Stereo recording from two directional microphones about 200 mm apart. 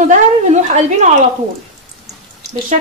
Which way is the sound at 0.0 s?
40° right (ahead or behind).